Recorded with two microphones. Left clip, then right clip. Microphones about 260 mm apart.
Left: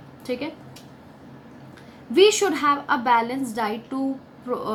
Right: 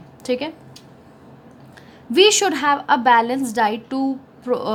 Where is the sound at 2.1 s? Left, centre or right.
Right.